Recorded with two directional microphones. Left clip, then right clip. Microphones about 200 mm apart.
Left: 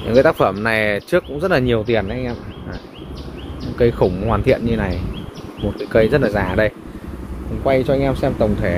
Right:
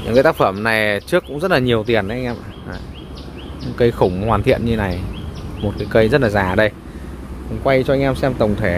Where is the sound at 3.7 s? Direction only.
20° right (ahead or behind).